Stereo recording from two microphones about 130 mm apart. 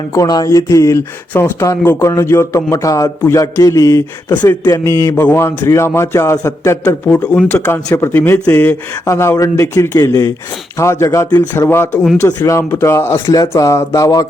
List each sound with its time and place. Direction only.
0.1 s a man's voice: 30° left (ahead or behind)
7.3 s a man's voice: 10° left (ahead or behind); by 14.3 s 25° left (ahead or behind)